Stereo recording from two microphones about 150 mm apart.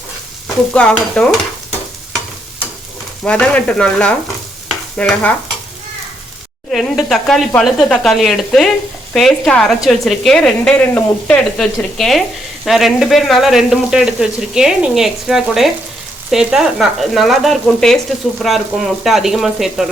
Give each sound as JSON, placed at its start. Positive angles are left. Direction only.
{"t": 0.4, "sound": "a woman's voice", "side_deg": 5}
{"t": 3.2, "sound": "frying", "side_deg": 5}
{"t": 6.7, "sound": "a woman's voice", "side_deg": 0}